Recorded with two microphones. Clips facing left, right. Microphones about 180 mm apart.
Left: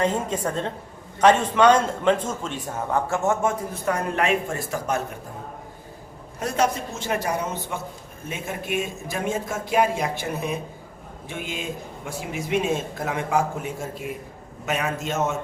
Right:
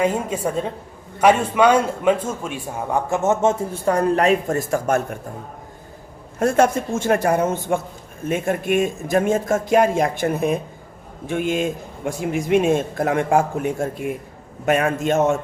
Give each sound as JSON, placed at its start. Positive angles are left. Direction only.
{"t": 0.0, "sound": "a woman's voice", "side_deg": -10}
{"t": 6.4, "sound": "speech", "side_deg": -50}